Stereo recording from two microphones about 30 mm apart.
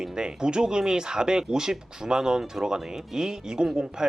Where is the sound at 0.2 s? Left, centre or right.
Right.